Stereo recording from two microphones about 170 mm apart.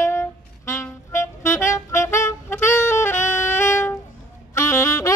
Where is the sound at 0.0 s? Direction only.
15° left (ahead or behind).